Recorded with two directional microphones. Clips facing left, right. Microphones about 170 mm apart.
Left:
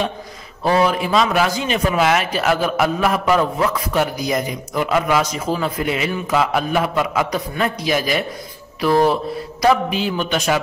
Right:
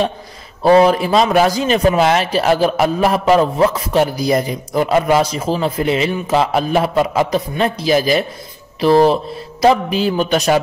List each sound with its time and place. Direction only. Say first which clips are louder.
0.7 s a man's voice: right 6 dB; 35° right (ahead or behind)
9.8 s a man's voice: right 5 dB; 40° right (ahead or behind)